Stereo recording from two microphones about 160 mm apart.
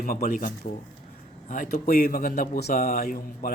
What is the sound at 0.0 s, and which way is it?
Speech, 60° left (ahead or behind).